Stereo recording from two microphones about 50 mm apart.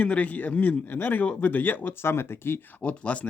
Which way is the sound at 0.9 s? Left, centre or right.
Left.